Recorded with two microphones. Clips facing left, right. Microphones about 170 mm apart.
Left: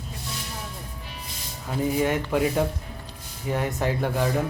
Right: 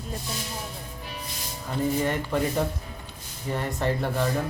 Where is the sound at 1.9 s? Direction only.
10° left (ahead or behind).